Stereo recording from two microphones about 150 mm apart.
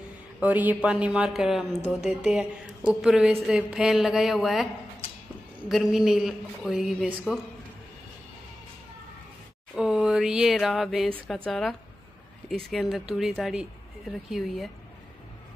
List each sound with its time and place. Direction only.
0.4 s speech: 10° right (ahead or behind)
5.7 s speech: 5° right (ahead or behind)
9.8 s a sound: 5° right (ahead or behind)
11.1 s speech: 5° left (ahead or behind)